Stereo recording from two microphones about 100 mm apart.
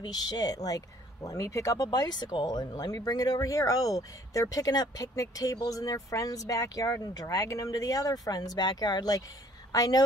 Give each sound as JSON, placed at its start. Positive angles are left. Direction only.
{"t": 0.0, "sound": "a woman's voice", "side_deg": 45}